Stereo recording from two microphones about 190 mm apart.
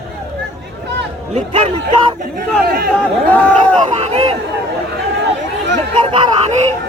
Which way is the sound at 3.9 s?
35° right (ahead or behind).